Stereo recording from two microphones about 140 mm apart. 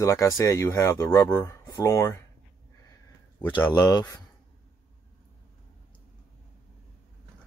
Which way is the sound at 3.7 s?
25° left (ahead or behind).